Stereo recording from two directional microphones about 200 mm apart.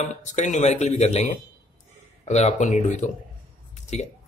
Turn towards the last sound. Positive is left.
turn(degrees=35)  # may be behind; listen again after turning